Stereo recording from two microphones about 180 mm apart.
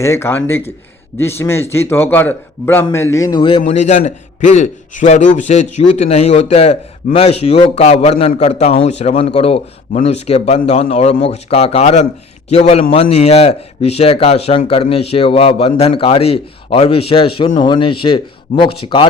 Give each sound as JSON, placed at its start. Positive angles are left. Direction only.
{"t": 0.0, "sound": "speech", "side_deg": 15}
{"t": 3.7, "sound": "a man's voice", "side_deg": 40}